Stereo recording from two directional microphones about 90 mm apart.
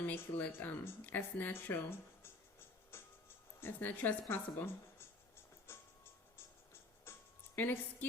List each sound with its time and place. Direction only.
0.0 s speech: 20° left (ahead or behind)
5.7 s music: 30° left (ahead or behind)
7.0 s music: 25° left (ahead or behind)